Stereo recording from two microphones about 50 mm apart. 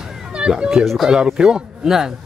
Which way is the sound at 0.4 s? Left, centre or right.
Centre.